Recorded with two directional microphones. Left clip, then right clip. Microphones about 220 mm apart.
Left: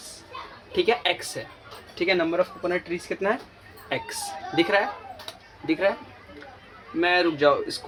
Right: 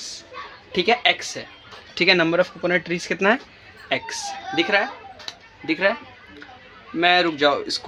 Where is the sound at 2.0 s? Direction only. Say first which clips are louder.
Right 5 dB; 50° right (ahead or behind).